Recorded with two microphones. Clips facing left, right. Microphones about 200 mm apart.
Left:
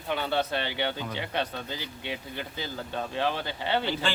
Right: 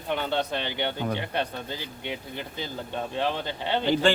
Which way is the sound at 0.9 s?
55° right (ahead or behind).